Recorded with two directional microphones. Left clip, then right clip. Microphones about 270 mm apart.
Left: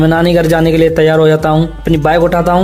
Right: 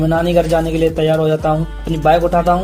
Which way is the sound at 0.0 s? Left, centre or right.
Left.